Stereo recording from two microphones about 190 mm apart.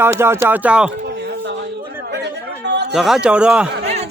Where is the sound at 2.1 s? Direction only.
65° right (ahead or behind).